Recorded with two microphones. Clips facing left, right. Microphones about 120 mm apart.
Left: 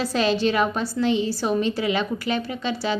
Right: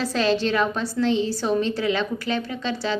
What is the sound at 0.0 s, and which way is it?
A woman's voice, 15° left (ahead or behind).